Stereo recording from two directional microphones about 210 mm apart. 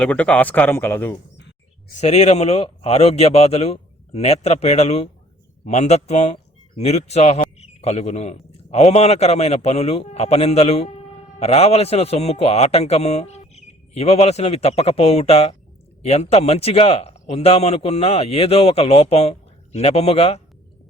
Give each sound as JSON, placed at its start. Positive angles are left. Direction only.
{"t": 0.0, "sound": "speech", "side_deg": 5}
{"t": 2.0, "sound": "a man's voice", "side_deg": 30}